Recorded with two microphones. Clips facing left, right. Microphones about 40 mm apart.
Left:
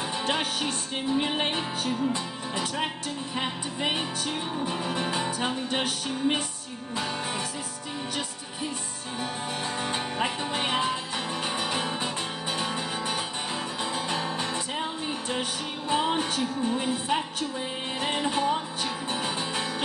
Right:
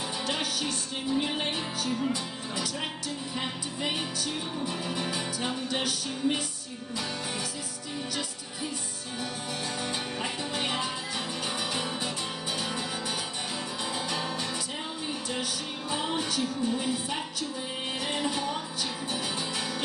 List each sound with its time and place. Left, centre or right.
0.2 s music: left
9.8 s music: left
15.9 s music: left